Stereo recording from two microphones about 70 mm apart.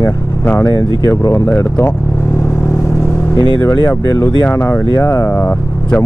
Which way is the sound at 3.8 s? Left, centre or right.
Left.